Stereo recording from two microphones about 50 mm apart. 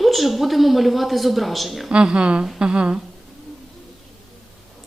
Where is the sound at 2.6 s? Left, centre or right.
Centre.